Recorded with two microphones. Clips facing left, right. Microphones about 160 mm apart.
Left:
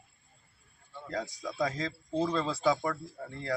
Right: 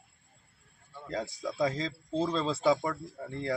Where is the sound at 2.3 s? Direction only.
25° right (ahead or behind).